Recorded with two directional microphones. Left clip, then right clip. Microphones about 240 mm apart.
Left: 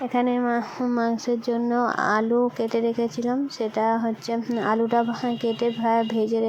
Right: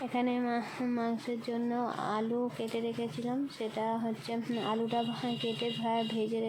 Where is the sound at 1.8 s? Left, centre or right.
Left.